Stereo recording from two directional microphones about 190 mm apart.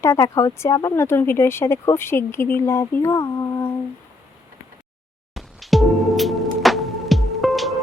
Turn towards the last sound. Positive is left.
turn(degrees=0)  # may be behind; listen again after turning